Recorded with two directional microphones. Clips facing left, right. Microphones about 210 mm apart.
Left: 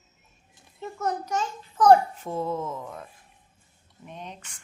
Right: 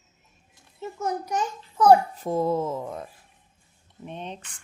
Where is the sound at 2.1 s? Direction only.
40° right (ahead or behind).